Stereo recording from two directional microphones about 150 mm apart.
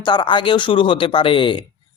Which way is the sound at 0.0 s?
30° left (ahead or behind).